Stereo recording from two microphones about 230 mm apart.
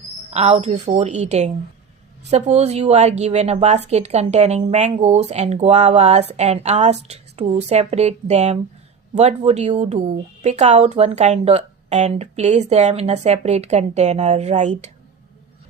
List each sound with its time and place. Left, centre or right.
0.3 s speech: right